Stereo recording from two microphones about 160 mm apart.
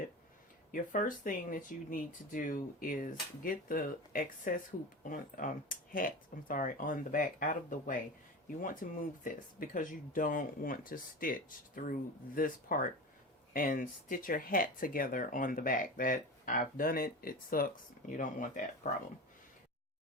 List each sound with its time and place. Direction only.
0.7 s speech: 55° left (ahead or behind)